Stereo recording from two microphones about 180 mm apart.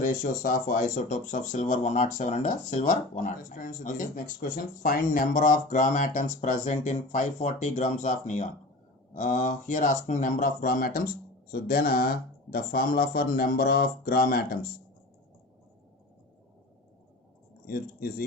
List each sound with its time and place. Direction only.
0.0 s speech: 45° left (ahead or behind)
17.7 s speech: 55° left (ahead or behind)